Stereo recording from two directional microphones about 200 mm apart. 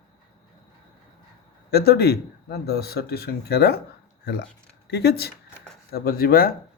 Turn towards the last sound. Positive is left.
turn(degrees=45)  # may be behind; listen again after turning